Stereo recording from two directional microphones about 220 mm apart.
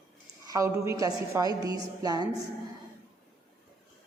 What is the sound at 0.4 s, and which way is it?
A woman's voice, 15° right (ahead or behind).